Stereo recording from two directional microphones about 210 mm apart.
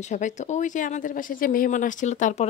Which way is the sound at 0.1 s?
35° left (ahead or behind).